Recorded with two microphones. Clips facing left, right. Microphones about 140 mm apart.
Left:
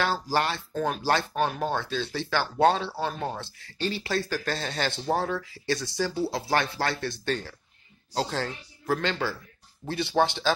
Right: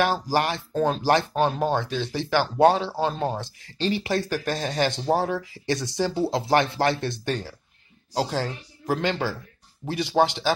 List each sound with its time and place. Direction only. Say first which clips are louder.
0.0 s speech: right 3 dB; 15° right (ahead or behind)